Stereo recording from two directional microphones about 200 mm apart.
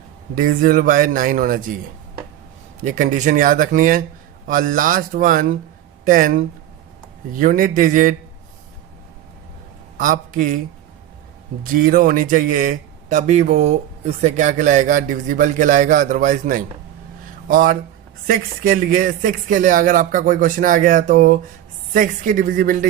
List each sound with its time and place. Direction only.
0.3 s speech: 45° right (ahead or behind)
2.8 s a man's voice: 40° right (ahead or behind)
10.0 s speech: 40° right (ahead or behind)
11.6 s a man's voice: 45° right (ahead or behind)